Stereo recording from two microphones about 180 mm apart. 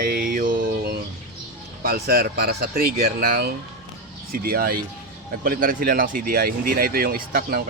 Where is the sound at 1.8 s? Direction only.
55° right (ahead or behind).